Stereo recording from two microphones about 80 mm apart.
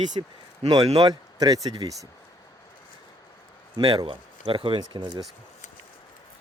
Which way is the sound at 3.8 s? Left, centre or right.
Right.